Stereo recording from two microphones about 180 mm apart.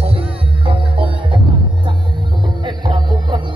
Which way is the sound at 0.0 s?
30° right (ahead or behind).